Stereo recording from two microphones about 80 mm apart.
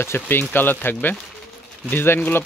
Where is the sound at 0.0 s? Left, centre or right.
Left.